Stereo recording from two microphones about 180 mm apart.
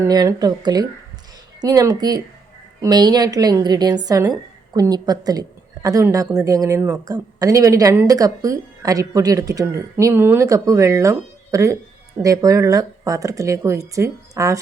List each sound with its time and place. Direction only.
0.0 s a woman's voice: 20° right (ahead or behind)